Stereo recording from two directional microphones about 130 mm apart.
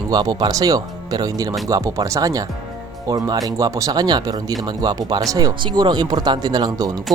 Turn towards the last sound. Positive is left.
turn(degrees=-30)  # may be behind; listen again after turning